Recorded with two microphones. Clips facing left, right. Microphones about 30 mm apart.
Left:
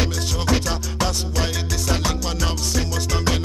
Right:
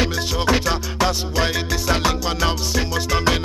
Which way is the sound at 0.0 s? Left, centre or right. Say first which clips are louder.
Right 4 dB; centre.